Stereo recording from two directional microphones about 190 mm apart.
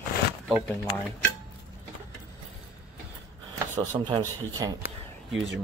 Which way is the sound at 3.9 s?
25° right (ahead or behind).